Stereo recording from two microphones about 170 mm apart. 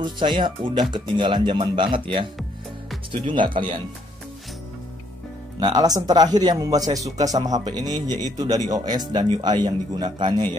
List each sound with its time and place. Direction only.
0.0 s speech: 25° right (ahead or behind)
5.6 s speech: 25° right (ahead or behind)